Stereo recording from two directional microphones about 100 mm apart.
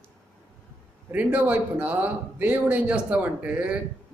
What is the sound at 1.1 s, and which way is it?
A man's voice, 15° right (ahead or behind).